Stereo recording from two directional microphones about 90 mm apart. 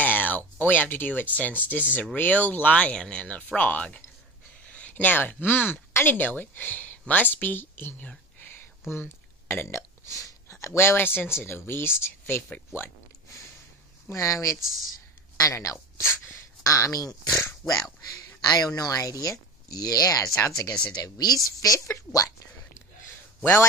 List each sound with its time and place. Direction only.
0.0 s a sound: 20° left (ahead or behind)
1.6 s speech: 20° left (ahead or behind)
14.0 s speech: 35° left (ahead or behind)
17.6 s speech: 20° left (ahead or behind)
18.4 s speech: 45° left (ahead or behind)